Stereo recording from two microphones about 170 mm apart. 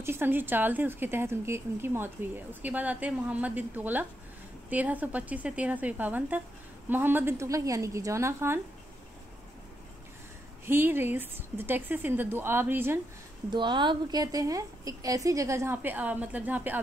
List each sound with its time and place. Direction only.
0.0 s a woman's voice: 15° right (ahead or behind)
10.6 s a woman's voice: 15° right (ahead or behind)
13.5 s a woman's voice: 25° right (ahead or behind); by 16.8 s 10° right (ahead or behind)